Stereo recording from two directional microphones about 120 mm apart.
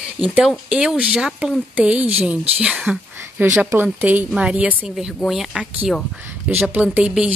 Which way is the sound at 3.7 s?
20° right (ahead or behind).